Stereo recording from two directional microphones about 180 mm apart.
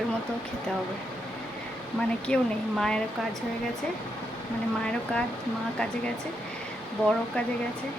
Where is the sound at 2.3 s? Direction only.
5° left (ahead or behind).